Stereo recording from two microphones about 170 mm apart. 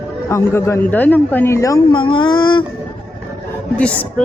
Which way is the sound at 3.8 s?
5° left (ahead or behind).